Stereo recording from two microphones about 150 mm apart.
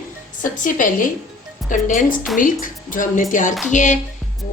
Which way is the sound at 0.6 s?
60° left (ahead or behind).